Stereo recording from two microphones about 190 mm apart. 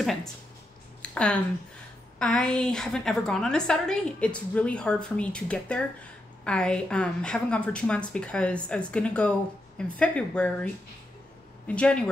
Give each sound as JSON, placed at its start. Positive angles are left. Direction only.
{"t": 0.0, "sound": "speech", "side_deg": 0}
{"t": 1.0, "sound": "a sound", "side_deg": 5}
{"t": 2.1, "sound": "a woman's voice", "side_deg": 5}